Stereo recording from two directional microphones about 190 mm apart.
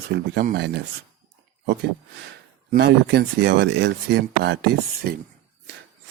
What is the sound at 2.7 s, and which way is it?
Speech, 60° right (ahead or behind).